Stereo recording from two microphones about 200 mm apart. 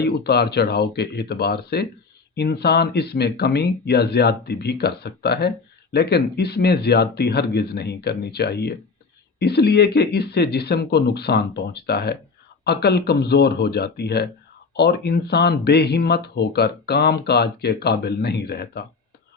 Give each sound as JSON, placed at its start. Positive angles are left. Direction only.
{"t": 0.0, "sound": "speech", "side_deg": 55}